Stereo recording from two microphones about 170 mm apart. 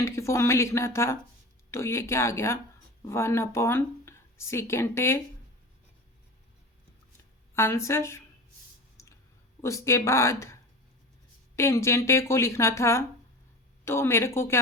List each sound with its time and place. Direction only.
0.0 s speech: 15° left (ahead or behind)
7.5 s speech: 15° left (ahead or behind)
9.6 s speech: 15° left (ahead or behind)